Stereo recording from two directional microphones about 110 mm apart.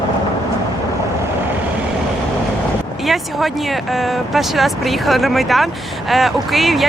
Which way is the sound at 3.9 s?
Centre (ahead or behind).